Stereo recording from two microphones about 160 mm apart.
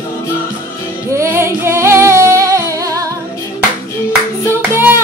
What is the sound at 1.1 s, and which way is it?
Singing, 15° right (ahead or behind).